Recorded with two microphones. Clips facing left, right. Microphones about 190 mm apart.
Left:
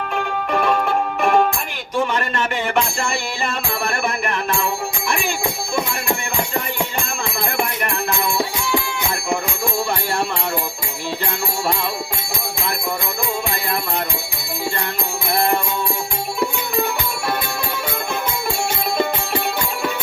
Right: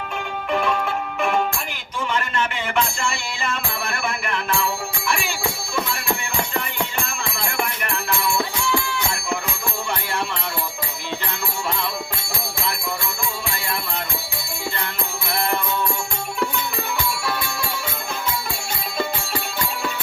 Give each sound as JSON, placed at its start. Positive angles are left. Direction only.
{"t": 0.1, "sound": "music", "side_deg": 50}
{"t": 2.0, "sound": "a sound", "side_deg": 45}
{"t": 4.0, "sound": "music", "side_deg": 45}
{"t": 15.3, "sound": "music", "side_deg": 50}
{"t": 17.2, "sound": "music", "side_deg": 55}